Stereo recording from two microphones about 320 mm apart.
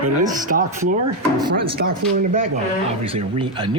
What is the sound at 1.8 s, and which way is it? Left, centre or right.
Speech, right.